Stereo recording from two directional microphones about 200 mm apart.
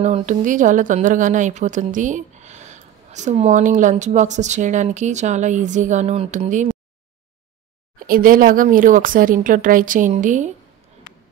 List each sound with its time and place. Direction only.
0.0 s a woman's voice: 35° right (ahead or behind)
8.1 s a woman's voice: 45° right (ahead or behind)